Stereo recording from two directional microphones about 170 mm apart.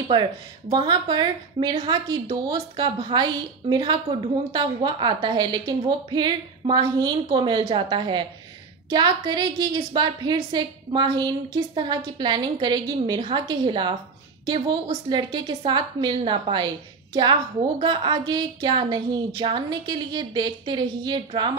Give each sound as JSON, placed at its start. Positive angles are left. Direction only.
{"t": 0.1, "sound": "a woman's voice", "side_deg": -25}